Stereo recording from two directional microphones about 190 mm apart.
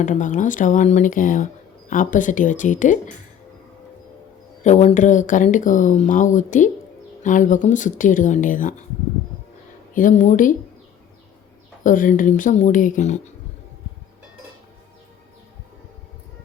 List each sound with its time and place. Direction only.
0.0 s speech: 45° left (ahead or behind)
4.6 s speech: 35° left (ahead or behind)
9.9 s speech: 45° left (ahead or behind)
11.8 s speech: 45° left (ahead or behind)